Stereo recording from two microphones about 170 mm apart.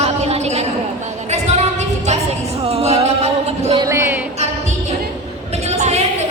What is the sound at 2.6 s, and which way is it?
Music, 35° right (ahead or behind).